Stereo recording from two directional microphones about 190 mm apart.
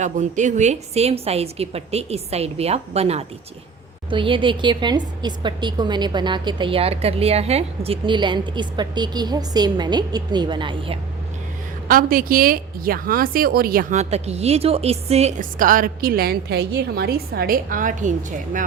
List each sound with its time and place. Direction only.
0.0 s a woman's voice: 40° right (ahead or behind)
11.9 s a woman's voice: 50° right (ahead or behind)